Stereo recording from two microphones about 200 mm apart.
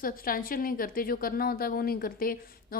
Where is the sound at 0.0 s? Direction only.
45° left (ahead or behind).